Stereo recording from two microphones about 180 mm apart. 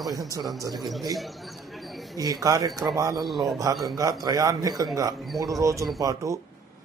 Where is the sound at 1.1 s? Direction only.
Centre (ahead or behind).